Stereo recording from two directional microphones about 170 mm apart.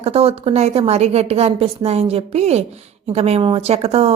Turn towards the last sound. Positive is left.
turn(degrees=-35)  # may be behind; listen again after turning